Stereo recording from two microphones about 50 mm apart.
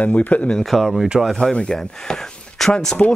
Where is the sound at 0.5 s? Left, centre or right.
Centre.